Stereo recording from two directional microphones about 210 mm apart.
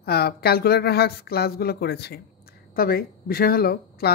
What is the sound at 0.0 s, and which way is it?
Speech, 50° left (ahead or behind).